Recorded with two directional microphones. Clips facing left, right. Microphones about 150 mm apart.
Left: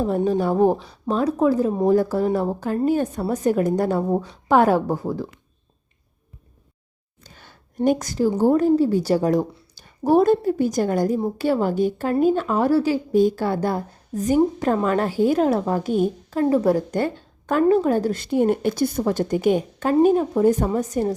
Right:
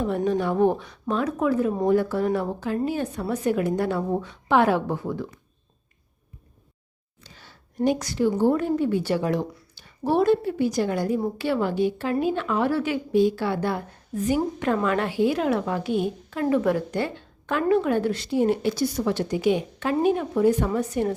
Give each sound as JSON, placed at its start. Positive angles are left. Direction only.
{"t": 0.2, "sound": "a woman's voice", "side_deg": 35}
{"t": 7.3, "sound": "a sound", "side_deg": 50}
{"t": 7.9, "sound": "a woman's voice", "side_deg": 45}